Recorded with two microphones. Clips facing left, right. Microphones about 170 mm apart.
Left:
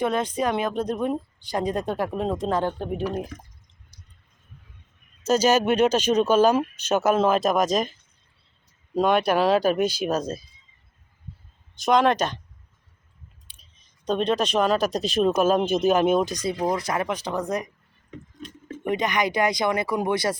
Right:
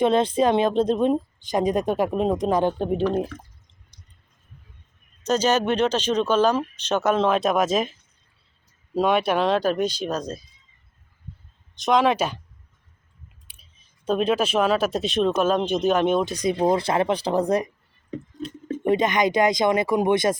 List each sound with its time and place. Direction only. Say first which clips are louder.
0.0 s a woman's voice: right 5 dB; 25° right (ahead or behind)
5.2 s speech: left 1 dB; 10° left (ahead or behind)
9.0 s speech: even; centre (ahead or behind)
11.8 s speech: even; centre (ahead or behind)
13.6 s speech: even; 5° right (ahead or behind)
16.3 s speech: right 4 dB; 15° right (ahead or behind)
16.6 s speech: right 5 dB; 30° right (ahead or behind)